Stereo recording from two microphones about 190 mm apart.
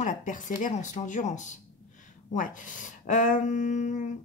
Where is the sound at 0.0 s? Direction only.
40° left (ahead or behind).